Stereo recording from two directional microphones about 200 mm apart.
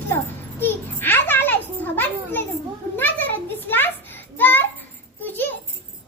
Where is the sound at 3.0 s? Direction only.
10° left (ahead or behind).